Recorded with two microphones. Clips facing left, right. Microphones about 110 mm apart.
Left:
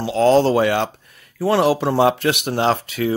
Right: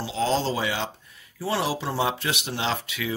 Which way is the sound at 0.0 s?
60° left (ahead or behind).